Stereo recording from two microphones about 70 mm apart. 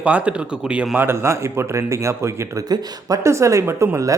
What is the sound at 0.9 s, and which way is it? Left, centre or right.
A woman's voice, right.